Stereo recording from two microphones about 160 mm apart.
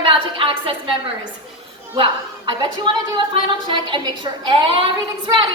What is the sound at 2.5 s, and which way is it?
A woman's voice, 30° right (ahead or behind).